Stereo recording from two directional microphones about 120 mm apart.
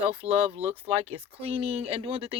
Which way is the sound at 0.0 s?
50° right (ahead or behind).